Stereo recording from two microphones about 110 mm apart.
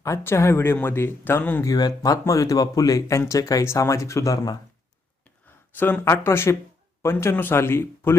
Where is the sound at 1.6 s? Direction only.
35° left (ahead or behind).